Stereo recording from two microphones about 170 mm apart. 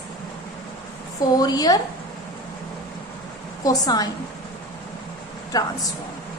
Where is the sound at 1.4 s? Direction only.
20° left (ahead or behind).